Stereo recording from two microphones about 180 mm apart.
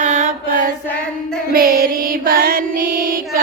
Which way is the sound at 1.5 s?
55° right (ahead or behind).